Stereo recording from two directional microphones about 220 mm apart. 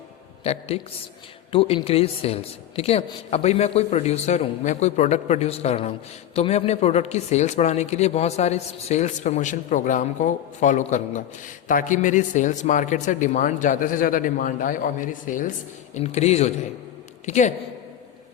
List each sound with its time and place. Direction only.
0.4 s a woman's voice: 30° left (ahead or behind)